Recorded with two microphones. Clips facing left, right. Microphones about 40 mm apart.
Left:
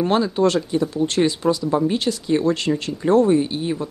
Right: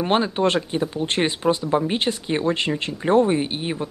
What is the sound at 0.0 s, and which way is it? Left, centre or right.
Speech, right.